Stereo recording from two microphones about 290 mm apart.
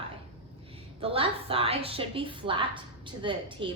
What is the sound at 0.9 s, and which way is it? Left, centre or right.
A woman's voice, centre.